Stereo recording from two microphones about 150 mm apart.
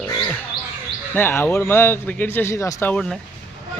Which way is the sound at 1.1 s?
15° left (ahead or behind).